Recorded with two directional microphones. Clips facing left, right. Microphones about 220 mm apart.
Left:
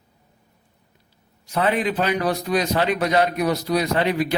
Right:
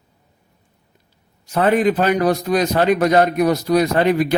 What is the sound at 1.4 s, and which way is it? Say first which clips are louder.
A man's voice: right 6 dB; 50° right (ahead or behind).